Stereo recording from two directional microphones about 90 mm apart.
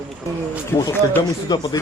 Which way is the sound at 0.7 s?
30° left (ahead or behind).